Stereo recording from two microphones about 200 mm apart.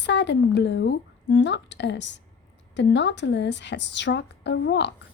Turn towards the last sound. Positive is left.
turn(degrees=60)  # may be behind; listen again after turning